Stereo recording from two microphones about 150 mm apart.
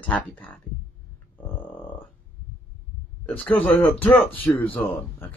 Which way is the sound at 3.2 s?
10° left (ahead or behind).